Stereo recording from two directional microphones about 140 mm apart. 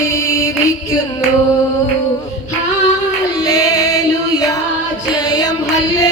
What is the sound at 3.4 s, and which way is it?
Music, 25° left (ahead or behind).